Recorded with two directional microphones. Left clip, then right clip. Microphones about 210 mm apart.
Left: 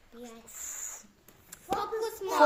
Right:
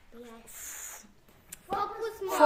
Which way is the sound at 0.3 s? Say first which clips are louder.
Left 2 dB; 5° right (ahead or behind).